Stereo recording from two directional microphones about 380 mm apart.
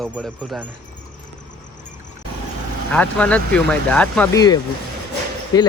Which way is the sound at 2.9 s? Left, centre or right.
Centre.